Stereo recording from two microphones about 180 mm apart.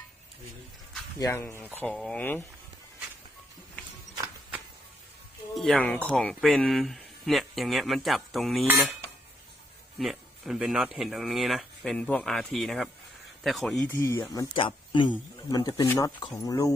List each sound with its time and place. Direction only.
1.2 s speech: 15° left (ahead or behind)
5.5 s speech: 5° left (ahead or behind)
10.0 s speech: centre (ahead or behind)
13.9 s speech: 15° left (ahead or behind)
14.5 s speech: 30° left (ahead or behind)